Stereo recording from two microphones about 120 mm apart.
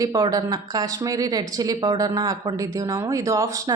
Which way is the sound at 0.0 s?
30° right (ahead or behind).